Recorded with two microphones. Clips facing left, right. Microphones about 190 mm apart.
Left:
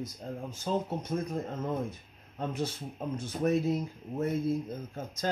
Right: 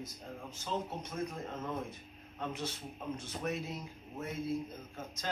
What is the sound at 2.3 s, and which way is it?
A man's voice, 40° left (ahead or behind).